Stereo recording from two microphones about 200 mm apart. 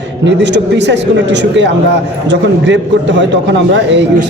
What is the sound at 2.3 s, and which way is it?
A man's voice, 65° right (ahead or behind).